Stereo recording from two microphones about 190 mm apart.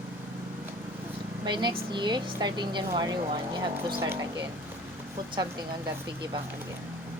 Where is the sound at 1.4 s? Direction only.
25° right (ahead or behind).